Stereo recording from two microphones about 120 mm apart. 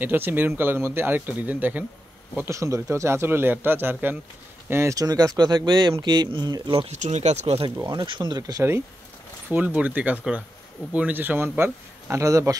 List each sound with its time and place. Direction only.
0.0 s a man's voice: 15° right (ahead or behind); by 6.9 s 40° right (ahead or behind)
6.9 s speech: 70° right (ahead or behind)
7.8 s speech: 35° right (ahead or behind)
9.5 s speech: 15° right (ahead or behind)